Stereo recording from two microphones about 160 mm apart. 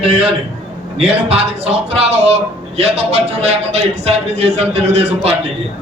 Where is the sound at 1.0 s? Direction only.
40° right (ahead or behind).